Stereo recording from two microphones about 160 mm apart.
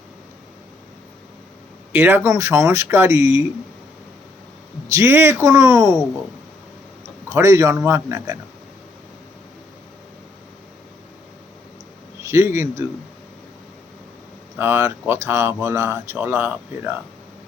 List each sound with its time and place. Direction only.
1.9 s speech: 10° right (ahead or behind)
4.9 s speech: 15° right (ahead or behind)
7.3 s speech: 20° right (ahead or behind)
12.3 s speech: 20° right (ahead or behind)
14.6 s speech: 15° right (ahead or behind)